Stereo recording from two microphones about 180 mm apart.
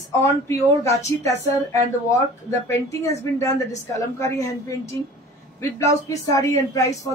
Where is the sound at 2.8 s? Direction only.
15° left (ahead or behind).